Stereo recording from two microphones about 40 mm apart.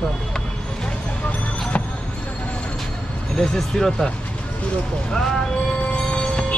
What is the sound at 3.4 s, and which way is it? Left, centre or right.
Speech, centre.